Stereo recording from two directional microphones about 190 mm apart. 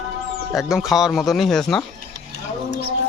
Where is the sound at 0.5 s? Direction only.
Centre (ahead or behind).